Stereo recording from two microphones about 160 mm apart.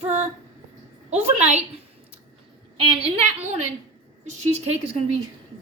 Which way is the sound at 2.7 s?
35° right (ahead or behind).